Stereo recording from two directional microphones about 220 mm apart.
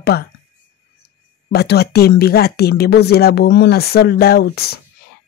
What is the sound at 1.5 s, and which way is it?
Speech, 45° left (ahead or behind).